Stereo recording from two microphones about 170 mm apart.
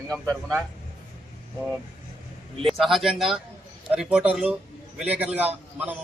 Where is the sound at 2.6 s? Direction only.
Centre (ahead or behind).